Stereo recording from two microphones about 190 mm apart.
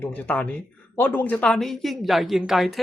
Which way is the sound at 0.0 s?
10° left (ahead or behind).